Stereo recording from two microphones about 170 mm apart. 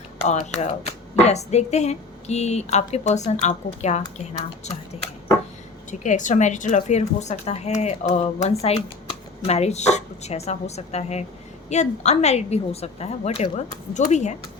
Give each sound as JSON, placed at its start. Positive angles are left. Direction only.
{"t": 0.3, "sound": "speech", "side_deg": 40}
{"t": 5.9, "sound": "speech", "side_deg": 45}